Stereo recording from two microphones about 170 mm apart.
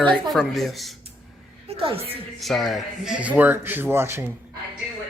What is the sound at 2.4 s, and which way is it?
Speech, centre (ahead or behind).